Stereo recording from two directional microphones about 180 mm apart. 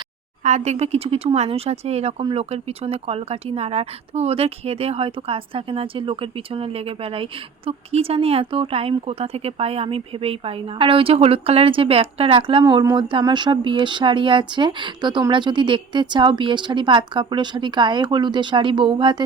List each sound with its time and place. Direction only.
0.4 s speech: 40° right (ahead or behind)